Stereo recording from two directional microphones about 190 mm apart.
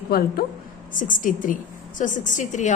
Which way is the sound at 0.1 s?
55° left (ahead or behind).